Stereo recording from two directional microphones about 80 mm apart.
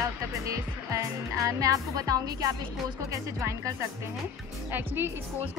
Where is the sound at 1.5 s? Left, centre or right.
Right.